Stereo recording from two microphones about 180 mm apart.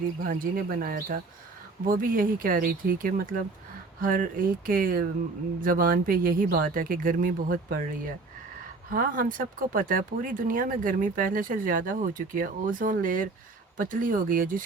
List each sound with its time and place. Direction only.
0.2 s speech: 55° right (ahead or behind)
8.9 s speech: 50° right (ahead or behind)